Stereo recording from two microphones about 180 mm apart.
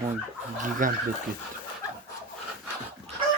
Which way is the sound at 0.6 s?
45° right (ahead or behind).